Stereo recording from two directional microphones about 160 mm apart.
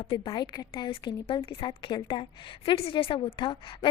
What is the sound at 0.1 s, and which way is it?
A woman's voice, 25° left (ahead or behind).